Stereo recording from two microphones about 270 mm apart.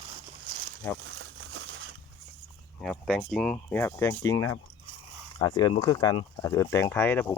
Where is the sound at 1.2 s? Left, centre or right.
Right.